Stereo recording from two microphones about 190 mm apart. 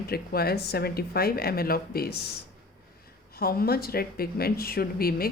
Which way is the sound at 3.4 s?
55° left (ahead or behind).